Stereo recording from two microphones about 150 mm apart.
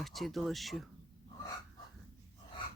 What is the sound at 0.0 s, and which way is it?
Speech, centre (ahead or behind).